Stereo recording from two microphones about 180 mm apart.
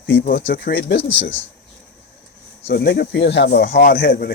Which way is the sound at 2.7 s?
65° left (ahead or behind).